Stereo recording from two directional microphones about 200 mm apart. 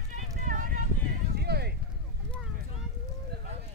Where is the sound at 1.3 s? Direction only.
55° right (ahead or behind).